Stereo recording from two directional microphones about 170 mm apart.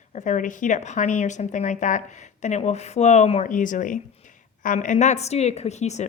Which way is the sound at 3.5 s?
50° left (ahead or behind).